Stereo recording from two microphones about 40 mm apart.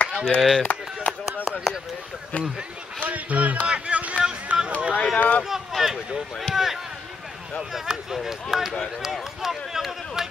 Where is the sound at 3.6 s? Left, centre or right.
Right.